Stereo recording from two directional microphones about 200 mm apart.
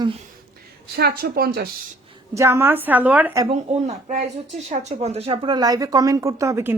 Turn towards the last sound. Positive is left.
turn(degrees=-15)  # may be behind; listen again after turning